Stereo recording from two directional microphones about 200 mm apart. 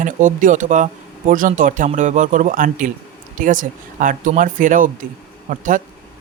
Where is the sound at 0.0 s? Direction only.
40° right (ahead or behind).